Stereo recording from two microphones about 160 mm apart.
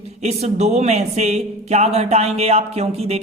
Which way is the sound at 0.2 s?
40° right (ahead or behind).